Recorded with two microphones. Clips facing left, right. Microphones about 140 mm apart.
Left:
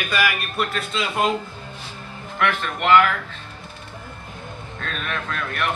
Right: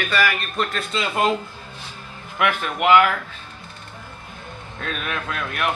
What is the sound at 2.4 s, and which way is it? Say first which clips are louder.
Speech: right 2 dB; 10° right (ahead or behind).